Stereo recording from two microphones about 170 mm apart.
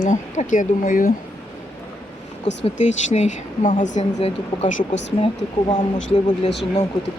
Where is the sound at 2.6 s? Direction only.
45° left (ahead or behind).